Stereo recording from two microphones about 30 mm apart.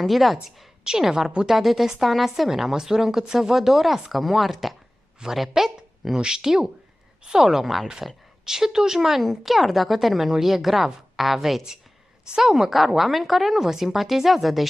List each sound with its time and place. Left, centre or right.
0.0 s speech: centre
0.8 s speech: centre
2.7 s speech: centre
5.5 s speech: centre
6.1 s speech: right
7.6 s speech: centre
8.5 s speech: centre